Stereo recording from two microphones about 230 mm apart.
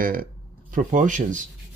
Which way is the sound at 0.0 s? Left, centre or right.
Right.